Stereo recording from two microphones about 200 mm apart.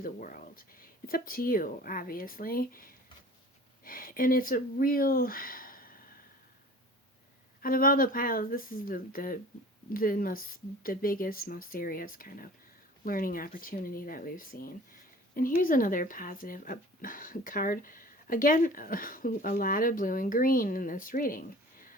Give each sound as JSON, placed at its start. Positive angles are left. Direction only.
{"t": 0.0, "sound": "speech", "side_deg": 45}
{"t": 7.6, "sound": "speech", "side_deg": 45}